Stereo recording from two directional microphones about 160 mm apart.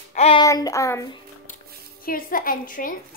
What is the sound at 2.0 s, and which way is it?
Speech, 65° left (ahead or behind).